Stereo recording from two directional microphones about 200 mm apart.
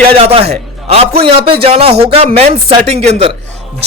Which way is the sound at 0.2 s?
30° right (ahead or behind).